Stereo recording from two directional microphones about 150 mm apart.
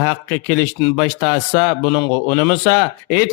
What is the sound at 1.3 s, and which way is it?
Mantra, 15° left (ahead or behind).